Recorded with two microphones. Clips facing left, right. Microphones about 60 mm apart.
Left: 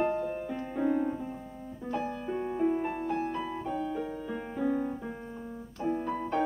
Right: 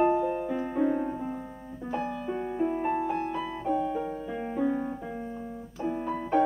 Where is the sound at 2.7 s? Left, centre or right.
Centre.